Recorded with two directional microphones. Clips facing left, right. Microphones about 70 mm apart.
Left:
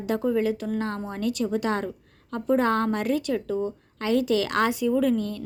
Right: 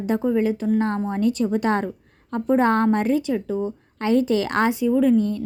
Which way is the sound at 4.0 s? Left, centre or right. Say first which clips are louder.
Right 3 dB; right.